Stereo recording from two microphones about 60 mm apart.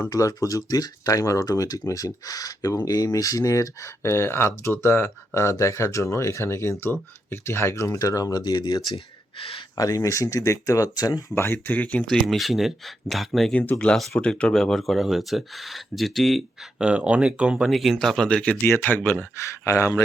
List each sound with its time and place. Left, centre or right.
0.1 s speech: left
4.0 s speech: left
9.7 s speech: left
11.3 s speech: left
12.0 s speech: centre
13.7 s speech: left; by 16.8 s centre
16.8 s speech: centre
17.7 s speech: centre
18.5 s speech: left
19.4 s speech: left